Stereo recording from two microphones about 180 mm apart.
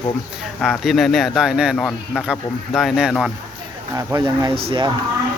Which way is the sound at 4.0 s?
20° right (ahead or behind).